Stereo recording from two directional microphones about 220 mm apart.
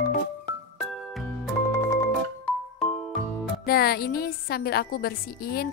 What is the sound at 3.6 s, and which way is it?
A woman's voice, 45° left (ahead or behind).